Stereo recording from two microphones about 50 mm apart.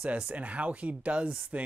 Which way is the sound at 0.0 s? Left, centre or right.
Right.